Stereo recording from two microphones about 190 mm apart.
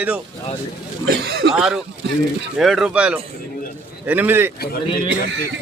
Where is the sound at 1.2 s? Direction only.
60° right (ahead or behind).